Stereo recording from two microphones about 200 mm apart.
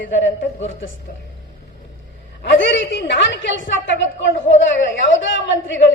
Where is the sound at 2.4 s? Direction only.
65° left (ahead or behind).